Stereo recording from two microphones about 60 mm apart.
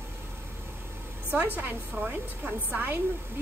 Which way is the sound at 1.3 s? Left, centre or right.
Right.